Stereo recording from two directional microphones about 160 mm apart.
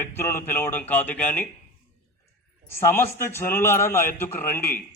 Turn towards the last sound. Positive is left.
turn(degrees=15)  # may be behind; listen again after turning